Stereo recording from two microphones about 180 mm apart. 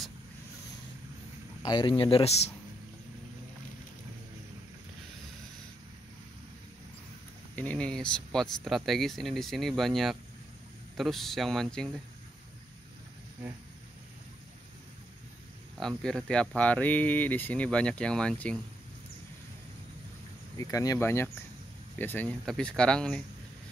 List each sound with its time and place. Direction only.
1.6 s speech: 25° left (ahead or behind)
7.5 s speech: 5° left (ahead or behind)
16.0 s speech: 5° left (ahead or behind)
20.5 s speech: 20° left (ahead or behind)